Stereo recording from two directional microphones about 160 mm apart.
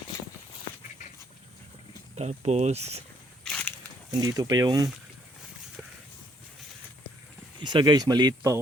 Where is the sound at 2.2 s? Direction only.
45° right (ahead or behind).